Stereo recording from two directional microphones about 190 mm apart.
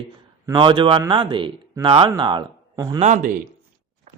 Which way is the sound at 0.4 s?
25° right (ahead or behind).